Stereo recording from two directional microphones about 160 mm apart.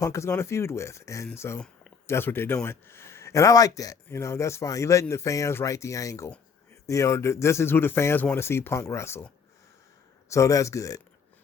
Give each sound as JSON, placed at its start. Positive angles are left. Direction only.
{"t": 0.0, "sound": "speech", "side_deg": 20}